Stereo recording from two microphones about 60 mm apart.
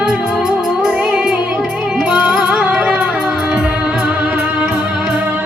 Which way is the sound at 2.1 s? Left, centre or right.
Centre.